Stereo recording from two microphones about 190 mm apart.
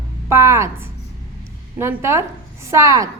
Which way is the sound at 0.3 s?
15° right (ahead or behind).